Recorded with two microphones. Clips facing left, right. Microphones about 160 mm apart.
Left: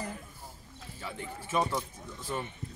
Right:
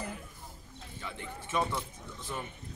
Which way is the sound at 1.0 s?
10° left (ahead or behind).